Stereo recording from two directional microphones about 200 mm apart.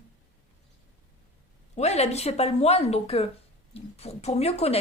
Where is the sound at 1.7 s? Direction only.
35° left (ahead or behind).